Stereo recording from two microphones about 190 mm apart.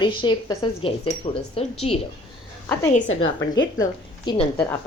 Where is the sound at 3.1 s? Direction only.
90° left.